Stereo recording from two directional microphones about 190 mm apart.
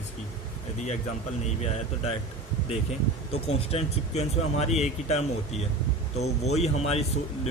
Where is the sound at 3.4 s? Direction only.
35° left (ahead or behind).